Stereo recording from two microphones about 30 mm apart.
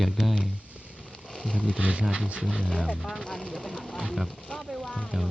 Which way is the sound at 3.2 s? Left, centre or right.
Centre.